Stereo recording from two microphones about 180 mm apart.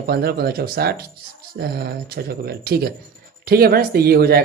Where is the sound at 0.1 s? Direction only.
60° right (ahead or behind).